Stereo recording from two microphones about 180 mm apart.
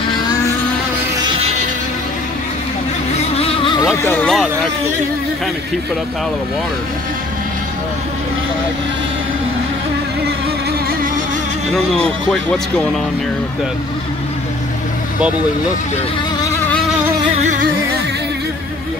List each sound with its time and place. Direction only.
3.3 s vehicle: 30° left (ahead or behind); by 4.5 s 5° left (ahead or behind)
11.7 s speech: 5° left (ahead or behind)